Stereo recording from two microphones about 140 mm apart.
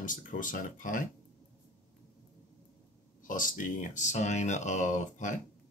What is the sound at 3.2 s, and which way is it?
Speech, 70° left (ahead or behind).